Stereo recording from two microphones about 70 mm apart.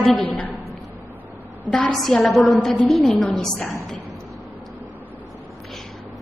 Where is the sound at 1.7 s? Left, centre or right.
Centre.